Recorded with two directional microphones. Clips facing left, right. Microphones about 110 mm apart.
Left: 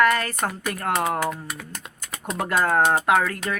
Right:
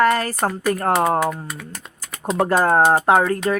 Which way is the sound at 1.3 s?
Centre (ahead or behind).